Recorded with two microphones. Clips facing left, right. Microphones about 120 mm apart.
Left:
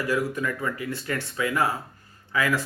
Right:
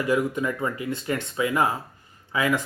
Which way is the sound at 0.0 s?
20° right (ahead or behind).